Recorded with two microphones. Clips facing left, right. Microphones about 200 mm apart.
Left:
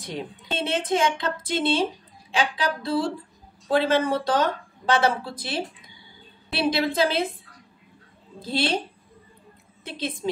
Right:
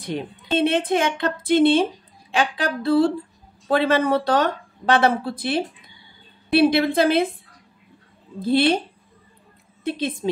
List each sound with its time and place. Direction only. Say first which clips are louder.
0.0 s speech: right 5 dB; 60° right (ahead or behind)
8.4 s speech: right 8 dB; 55° right (ahead or behind)
9.8 s speech: right 5 dB; 55° right (ahead or behind)